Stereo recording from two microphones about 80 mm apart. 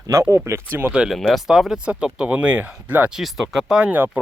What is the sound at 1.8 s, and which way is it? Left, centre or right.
Speech, centre.